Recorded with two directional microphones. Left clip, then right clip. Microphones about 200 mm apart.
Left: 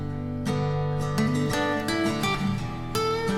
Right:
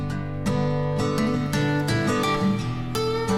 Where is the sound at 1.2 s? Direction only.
Centre (ahead or behind).